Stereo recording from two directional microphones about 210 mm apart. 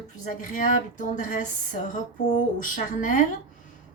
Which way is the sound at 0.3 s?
40° left (ahead or behind).